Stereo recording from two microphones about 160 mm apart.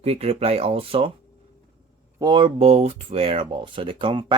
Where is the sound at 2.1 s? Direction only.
25° right (ahead or behind).